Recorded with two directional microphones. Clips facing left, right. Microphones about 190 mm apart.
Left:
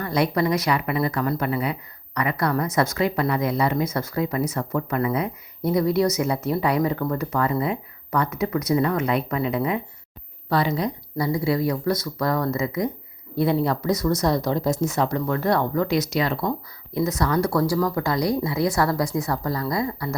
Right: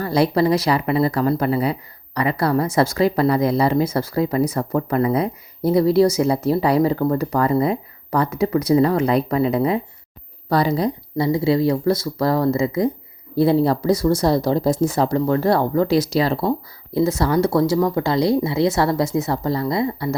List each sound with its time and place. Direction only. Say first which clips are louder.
0.0 s speech: right 5 dB; 30° right (ahead or behind)